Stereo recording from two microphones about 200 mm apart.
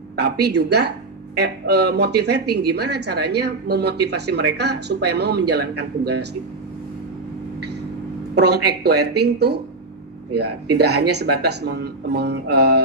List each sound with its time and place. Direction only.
0.2 s speech: 55° right (ahead or behind)
8.4 s speech: 55° right (ahead or behind)